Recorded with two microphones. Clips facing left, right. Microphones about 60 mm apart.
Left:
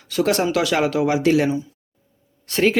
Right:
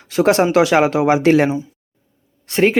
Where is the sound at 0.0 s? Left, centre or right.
Right.